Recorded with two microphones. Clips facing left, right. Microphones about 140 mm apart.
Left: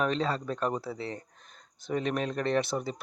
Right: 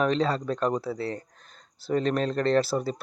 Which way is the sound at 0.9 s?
20° left (ahead or behind).